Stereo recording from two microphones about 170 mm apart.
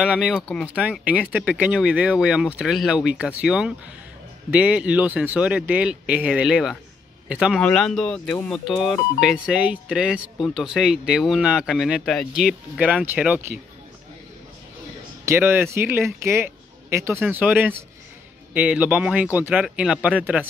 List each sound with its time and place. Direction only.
0.0 s speech: 5° right (ahead or behind)
15.2 s speech: 15° right (ahead or behind)